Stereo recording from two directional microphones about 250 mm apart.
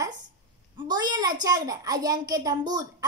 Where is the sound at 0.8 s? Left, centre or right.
Centre.